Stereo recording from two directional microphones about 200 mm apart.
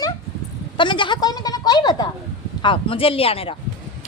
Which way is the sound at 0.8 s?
25° left (ahead or behind).